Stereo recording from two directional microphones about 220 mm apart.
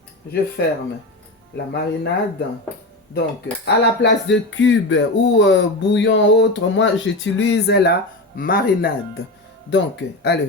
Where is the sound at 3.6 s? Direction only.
50° left (ahead or behind).